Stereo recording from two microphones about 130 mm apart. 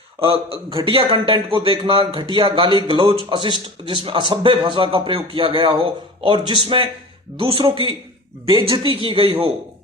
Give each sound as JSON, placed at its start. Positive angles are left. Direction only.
{"t": 0.9, "sound": "a man's voice", "side_deg": -40}